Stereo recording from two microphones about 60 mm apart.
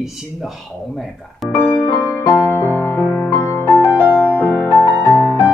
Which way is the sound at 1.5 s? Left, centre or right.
Left.